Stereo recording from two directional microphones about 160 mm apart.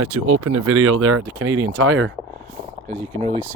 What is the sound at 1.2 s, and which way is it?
Speech, 25° right (ahead or behind).